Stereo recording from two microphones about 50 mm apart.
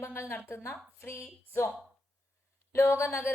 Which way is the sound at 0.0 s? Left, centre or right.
Left.